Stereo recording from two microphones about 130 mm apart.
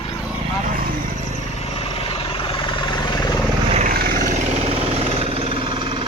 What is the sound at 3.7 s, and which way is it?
Vehicle, 70° right (ahead or behind).